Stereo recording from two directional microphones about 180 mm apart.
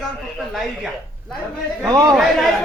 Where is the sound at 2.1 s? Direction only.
Centre (ahead or behind).